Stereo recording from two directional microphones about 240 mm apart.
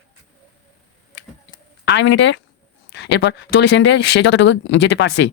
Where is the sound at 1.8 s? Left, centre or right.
Left.